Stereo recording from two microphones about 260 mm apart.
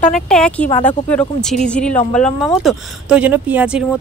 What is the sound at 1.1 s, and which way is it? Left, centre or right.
A woman's voice, centre.